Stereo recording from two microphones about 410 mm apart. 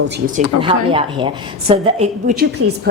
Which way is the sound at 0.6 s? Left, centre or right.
Centre.